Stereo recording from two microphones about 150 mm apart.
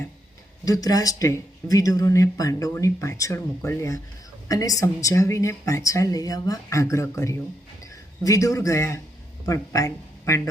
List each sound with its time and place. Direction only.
0.6 s speech: 25° left (ahead or behind)